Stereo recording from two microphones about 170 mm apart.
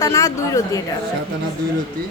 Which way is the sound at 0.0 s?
20° left (ahead or behind).